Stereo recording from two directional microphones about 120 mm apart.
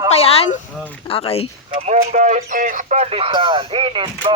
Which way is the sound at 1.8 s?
80° right.